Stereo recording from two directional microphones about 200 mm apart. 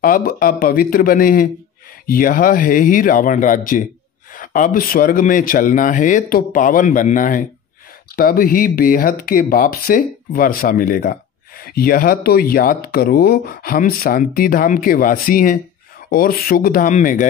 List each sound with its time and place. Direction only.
0.0 s speech: 45° left (ahead or behind)